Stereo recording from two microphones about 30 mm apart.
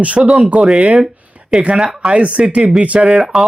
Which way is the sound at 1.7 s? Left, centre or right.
Right.